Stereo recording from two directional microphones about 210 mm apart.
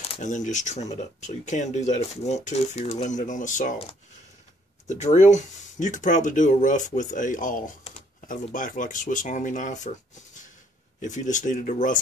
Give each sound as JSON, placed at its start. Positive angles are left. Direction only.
{"t": 0.0, "sound": "speech", "side_deg": 30}